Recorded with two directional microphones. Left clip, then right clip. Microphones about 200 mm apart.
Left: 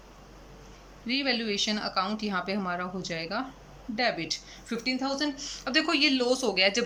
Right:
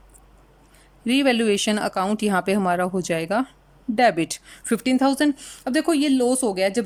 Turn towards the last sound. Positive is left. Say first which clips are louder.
# right 3 dB
turn(degrees=-35)  # may be behind; listen again after turning